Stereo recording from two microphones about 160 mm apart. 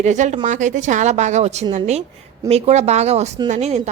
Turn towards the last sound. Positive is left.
turn(degrees=-45)  # may be behind; listen again after turning